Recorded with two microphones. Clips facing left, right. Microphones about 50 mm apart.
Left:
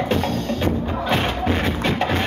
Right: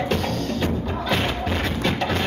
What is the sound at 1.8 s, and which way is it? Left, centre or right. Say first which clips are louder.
Music: left 1 dB; left.